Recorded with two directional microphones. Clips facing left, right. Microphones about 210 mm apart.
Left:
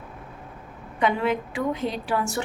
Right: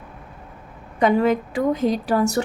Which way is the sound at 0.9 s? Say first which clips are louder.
Right 6 dB; 40° right (ahead or behind).